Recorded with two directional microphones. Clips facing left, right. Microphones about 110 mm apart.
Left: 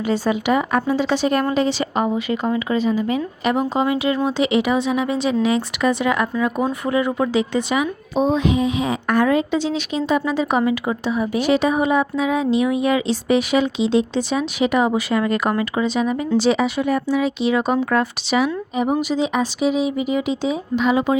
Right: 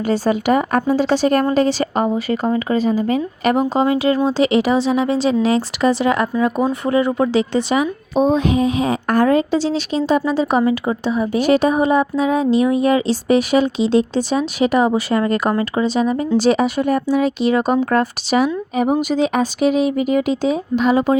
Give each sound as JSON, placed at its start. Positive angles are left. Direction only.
{"t": 0.1, "sound": "speech", "side_deg": -45}
{"t": 8.2, "sound": "speech", "side_deg": -45}
{"t": 11.3, "sound": "speech", "side_deg": -45}